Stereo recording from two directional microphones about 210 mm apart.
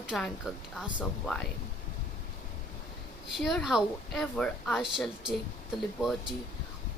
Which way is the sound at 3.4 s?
Centre (ahead or behind).